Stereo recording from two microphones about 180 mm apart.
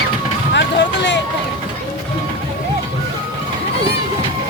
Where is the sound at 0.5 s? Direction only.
75° left (ahead or behind).